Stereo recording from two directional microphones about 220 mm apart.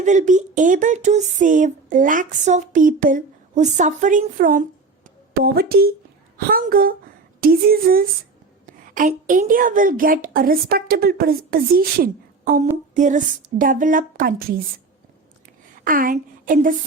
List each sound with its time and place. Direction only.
0.0 s speech: 35° right (ahead or behind)
15.8 s a woman's voice: 40° right (ahead or behind)